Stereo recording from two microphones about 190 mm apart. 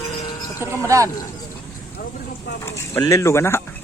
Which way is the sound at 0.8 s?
15° right (ahead or behind).